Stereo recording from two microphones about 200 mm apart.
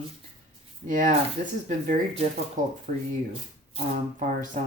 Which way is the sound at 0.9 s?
40° right (ahead or behind).